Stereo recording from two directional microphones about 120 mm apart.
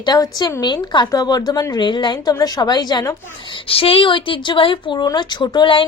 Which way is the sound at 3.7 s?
50° left (ahead or behind).